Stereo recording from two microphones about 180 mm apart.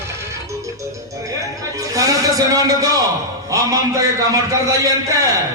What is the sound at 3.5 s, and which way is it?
A man's voice, 20° right (ahead or behind).